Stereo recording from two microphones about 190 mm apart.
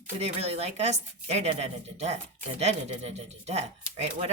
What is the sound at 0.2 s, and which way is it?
Speech, 35° right (ahead or behind).